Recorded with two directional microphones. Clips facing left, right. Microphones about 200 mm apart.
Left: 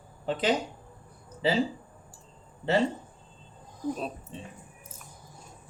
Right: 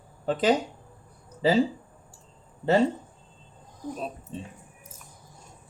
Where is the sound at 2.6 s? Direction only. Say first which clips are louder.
Right 4 dB; 45° right (ahead or behind).